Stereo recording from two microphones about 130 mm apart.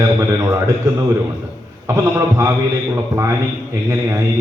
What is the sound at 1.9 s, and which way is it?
A man's voice, 20° right (ahead or behind).